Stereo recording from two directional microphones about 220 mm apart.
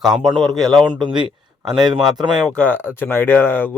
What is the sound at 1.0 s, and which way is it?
Speech, 20° right (ahead or behind).